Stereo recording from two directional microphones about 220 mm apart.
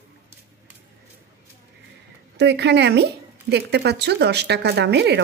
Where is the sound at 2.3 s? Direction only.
50° right (ahead or behind).